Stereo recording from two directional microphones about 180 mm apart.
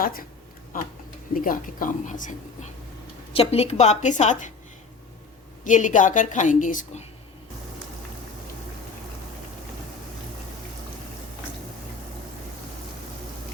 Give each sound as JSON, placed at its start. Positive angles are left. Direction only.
{"t": 0.0, "sound": "speech", "side_deg": 55}
{"t": 3.3, "sound": "a woman's voice", "side_deg": 35}
{"t": 5.6, "sound": "speech", "side_deg": 45}